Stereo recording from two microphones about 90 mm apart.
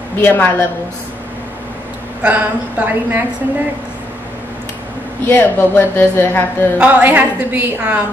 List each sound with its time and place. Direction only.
0.2 s a woman's voice: 25° left (ahead or behind)
2.2 s a woman's voice: 20° right (ahead or behind)
5.2 s a woman's voice: 25° left (ahead or behind)
6.8 s a woman's voice: 20° right (ahead or behind)